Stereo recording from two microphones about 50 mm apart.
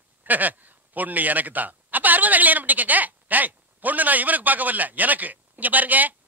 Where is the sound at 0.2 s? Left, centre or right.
Right.